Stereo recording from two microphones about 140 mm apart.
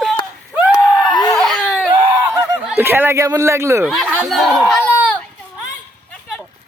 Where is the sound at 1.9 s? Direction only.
20° right (ahead or behind).